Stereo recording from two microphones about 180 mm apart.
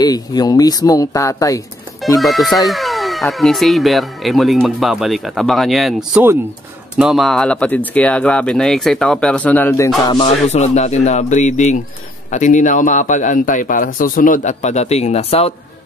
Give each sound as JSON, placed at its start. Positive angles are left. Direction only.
{"t": 0.0, "sound": "speech", "side_deg": 20}
{"t": 2.1, "sound": "speech", "side_deg": 0}
{"t": 10.0, "sound": "speech", "side_deg": 25}
{"t": 10.5, "sound": "a man's voice", "side_deg": 40}